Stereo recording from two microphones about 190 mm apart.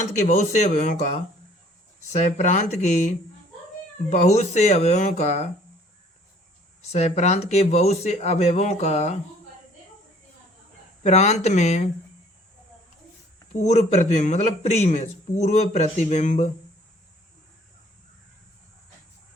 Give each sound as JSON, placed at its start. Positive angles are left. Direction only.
{"t": 0.0, "sound": "a man's voice", "side_deg": 40}
{"t": 6.9, "sound": "a man's voice", "side_deg": 35}
{"t": 11.0, "sound": "a man's voice", "side_deg": 35}
{"t": 13.5, "sound": "a man's voice", "side_deg": 35}